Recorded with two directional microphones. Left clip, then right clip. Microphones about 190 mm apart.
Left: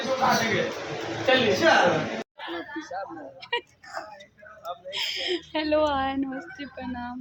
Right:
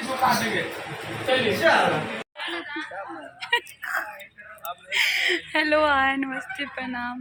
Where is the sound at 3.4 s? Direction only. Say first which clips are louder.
Right 6 dB; 5° right (ahead or behind).